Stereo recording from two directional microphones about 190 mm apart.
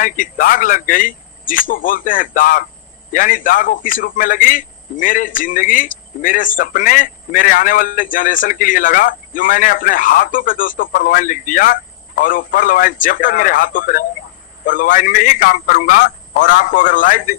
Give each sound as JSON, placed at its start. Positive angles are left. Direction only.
{"t": 0.0, "sound": "a man's voice", "side_deg": 45}